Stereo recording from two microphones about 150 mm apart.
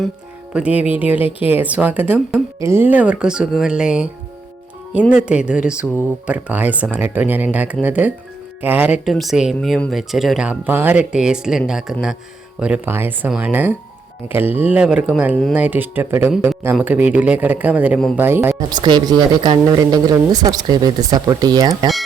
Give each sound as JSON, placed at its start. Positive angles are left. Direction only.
{"t": 0.5, "sound": "speech", "side_deg": -10}
{"t": 5.2, "sound": "speech", "side_deg": -5}
{"t": 9.0, "sound": "speech", "side_deg": 0}
{"t": 18.7, "sound": "speech", "side_deg": -30}